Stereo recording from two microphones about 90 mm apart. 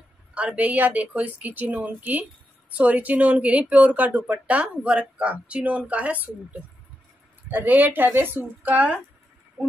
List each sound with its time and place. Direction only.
0.3 s speech: 15° right (ahead or behind)
7.4 s speech: 20° right (ahead or behind)
9.6 s a sound: 10° right (ahead or behind)